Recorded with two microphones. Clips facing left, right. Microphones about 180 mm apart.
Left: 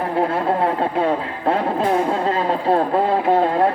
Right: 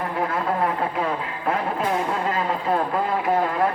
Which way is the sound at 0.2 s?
30° left (ahead or behind).